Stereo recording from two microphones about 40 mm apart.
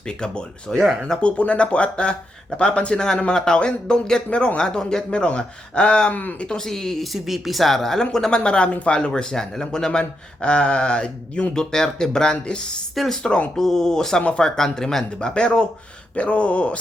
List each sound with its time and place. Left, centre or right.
0.1 s a man's voice: left
0.7 s speech: centre
1.2 s a man's voice: left
6.6 s speech: centre
7.0 s speech: centre
8.4 s a man's voice: left
9.0 s a man's voice: centre
11.5 s speech: centre
12.9 s speech: centre
13.2 s a man's voice: left
13.6 s speech: centre
14.2 s a man's voice: left
14.4 s speech: centre; by 16.7 s left